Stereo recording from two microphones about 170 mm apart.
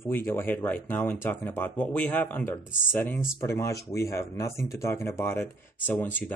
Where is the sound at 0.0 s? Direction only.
15° left (ahead or behind).